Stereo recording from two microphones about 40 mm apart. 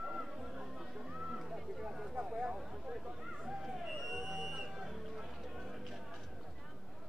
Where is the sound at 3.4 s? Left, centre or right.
Centre.